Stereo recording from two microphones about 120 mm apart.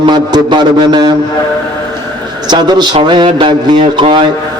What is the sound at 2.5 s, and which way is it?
Speech, 35° right (ahead or behind).